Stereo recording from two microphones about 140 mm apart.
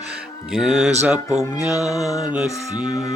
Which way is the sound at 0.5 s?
5° right (ahead or behind).